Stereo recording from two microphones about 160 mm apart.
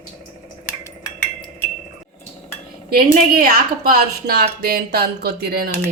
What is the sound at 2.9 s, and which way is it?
A woman's voice, 65° right (ahead or behind).